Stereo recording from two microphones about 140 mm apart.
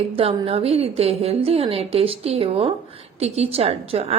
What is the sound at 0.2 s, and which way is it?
A woman's voice, 45° right (ahead or behind).